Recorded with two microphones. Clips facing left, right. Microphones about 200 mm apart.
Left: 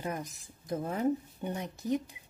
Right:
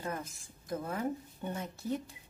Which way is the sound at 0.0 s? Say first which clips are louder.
Left 2 dB; 15° left (ahead or behind).